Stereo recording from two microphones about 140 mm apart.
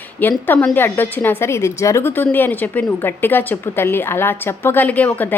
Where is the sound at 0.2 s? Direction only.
15° left (ahead or behind).